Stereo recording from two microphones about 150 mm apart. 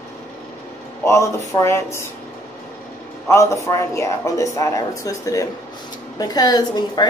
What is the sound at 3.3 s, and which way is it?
A woman's voice, 20° left (ahead or behind).